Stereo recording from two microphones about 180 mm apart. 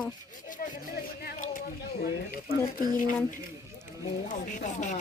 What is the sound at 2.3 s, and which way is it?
Speech, 50° left (ahead or behind).